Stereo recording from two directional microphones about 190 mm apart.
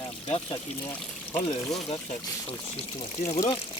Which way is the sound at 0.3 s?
30° left (ahead or behind).